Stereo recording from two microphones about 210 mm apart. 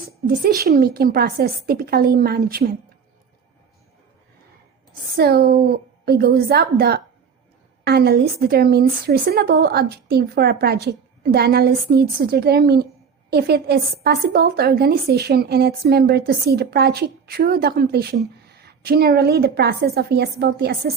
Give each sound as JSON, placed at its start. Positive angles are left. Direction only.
{"t": 0.4, "sound": "a woman's voice", "side_deg": -45}
{"t": 5.1, "sound": "a woman's voice", "side_deg": -45}